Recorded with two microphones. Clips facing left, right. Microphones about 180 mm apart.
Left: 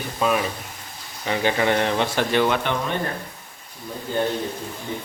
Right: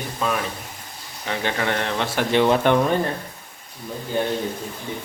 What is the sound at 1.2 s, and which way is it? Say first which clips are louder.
A man's voice: left 3 dB; 5° left (ahead or behind).